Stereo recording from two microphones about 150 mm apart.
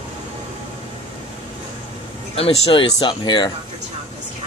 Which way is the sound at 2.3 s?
35° left (ahead or behind).